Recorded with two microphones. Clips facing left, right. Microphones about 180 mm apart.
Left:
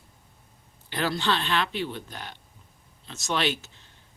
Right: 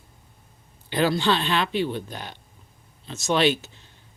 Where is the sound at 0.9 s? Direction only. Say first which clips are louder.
Right 5 dB; 15° right (ahead or behind).